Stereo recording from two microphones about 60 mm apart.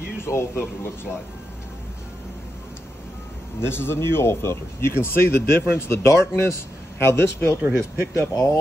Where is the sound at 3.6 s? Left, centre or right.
Left.